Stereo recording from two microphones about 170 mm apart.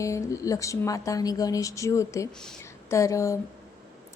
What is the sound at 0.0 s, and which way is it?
A woman's voice, 20° left (ahead or behind).